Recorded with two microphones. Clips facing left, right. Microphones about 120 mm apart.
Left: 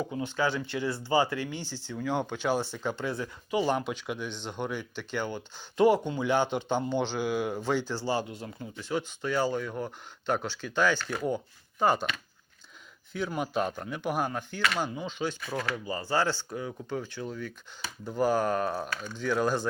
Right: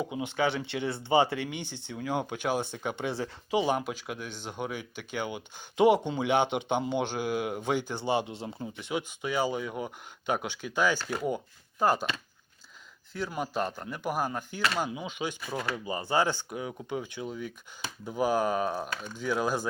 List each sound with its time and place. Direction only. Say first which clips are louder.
0.0 s speech: even; 15° right (ahead or behind)
3.8 s speech: left 2 dB; 5° right (ahead or behind)
7.9 s speech: right 1 dB; 20° right (ahead or behind); by 12.0 s 5° right (ahead or behind)
13.1 s speech: left 2 dB; centre (ahead or behind)